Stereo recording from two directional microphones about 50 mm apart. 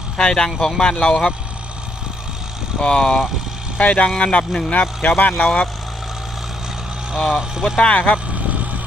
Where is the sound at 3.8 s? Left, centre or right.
Left.